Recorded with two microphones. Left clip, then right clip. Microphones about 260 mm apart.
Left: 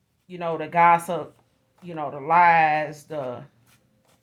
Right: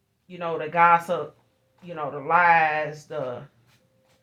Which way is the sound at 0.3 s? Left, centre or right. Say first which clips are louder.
Left 1 dB; left.